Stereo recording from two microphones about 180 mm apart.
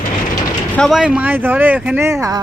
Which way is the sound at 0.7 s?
Centre (ahead or behind).